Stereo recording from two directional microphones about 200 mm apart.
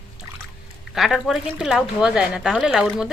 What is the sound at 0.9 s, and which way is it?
Speech, centre (ahead or behind).